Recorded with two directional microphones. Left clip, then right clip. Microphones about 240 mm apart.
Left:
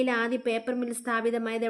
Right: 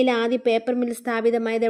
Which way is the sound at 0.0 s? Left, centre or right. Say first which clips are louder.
Right 6 dB; right.